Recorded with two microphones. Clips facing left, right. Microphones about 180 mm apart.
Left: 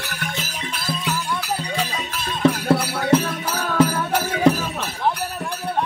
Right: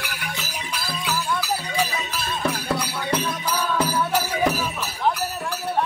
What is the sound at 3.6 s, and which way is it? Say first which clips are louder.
Music: left 5 dB; 50° left (ahead or behind).